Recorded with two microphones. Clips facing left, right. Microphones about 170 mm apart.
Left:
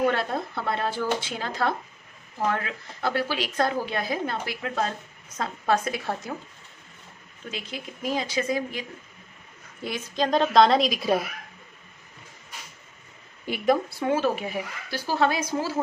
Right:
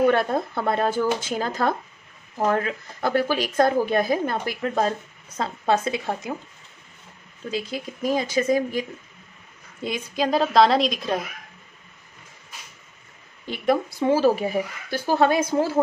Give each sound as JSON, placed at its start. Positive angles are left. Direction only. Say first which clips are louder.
{"t": 0.1, "sound": "a woman's voice", "louder": "right 6 dB", "side_deg": -50}
{"t": 5.4, "sound": "speech", "louder": "right 2 dB", "side_deg": -25}
{"t": 7.5, "sound": "a woman's voice", "louder": "right 8 dB", "side_deg": -45}
{"t": 9.8, "sound": "a woman's voice", "louder": "right 2 dB", "side_deg": -15}
{"t": 13.5, "sound": "a woman's voice", "louder": "left 2 dB", "side_deg": 10}
{"t": 13.8, "sound": "speech", "louder": "right 5 dB", "side_deg": -20}
{"t": 14.1, "sound": "a woman's voice", "louder": "right 6 dB", "side_deg": -35}